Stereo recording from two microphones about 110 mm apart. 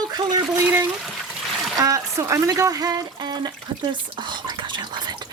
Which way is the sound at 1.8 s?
30° right (ahead or behind).